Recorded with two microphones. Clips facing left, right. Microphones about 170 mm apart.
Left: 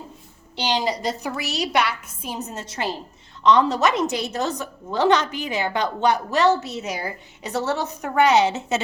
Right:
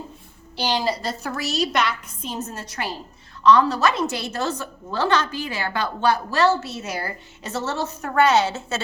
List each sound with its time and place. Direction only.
0.5 s a woman's voice: 20° left (ahead or behind)